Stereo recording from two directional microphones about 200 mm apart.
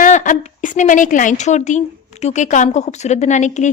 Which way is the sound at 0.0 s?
40° left (ahead or behind).